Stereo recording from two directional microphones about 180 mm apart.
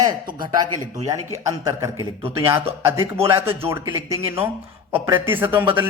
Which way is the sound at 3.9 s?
15° right (ahead or behind).